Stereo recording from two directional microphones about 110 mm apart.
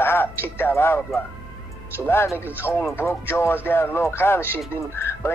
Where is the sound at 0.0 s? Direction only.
20° left (ahead or behind).